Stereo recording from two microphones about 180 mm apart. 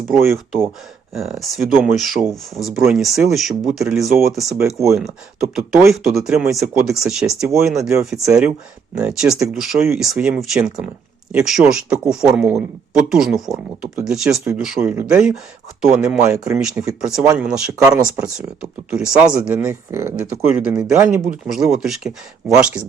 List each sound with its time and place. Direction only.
0.1 s speech: 5° right (ahead or behind)
8.2 s speech: 15° right (ahead or behind)
9.0 s speech: 5° right (ahead or behind)